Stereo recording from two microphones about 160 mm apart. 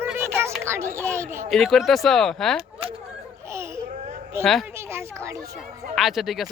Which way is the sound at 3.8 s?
45° right (ahead or behind).